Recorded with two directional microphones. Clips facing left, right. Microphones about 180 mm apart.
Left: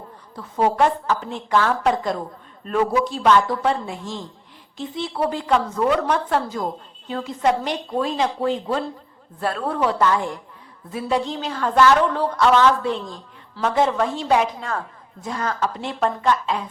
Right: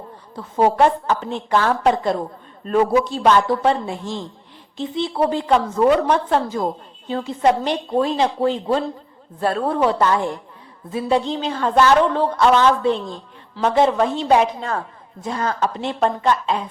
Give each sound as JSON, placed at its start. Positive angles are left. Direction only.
{"t": 0.3, "sound": "a woman's voice", "side_deg": -30}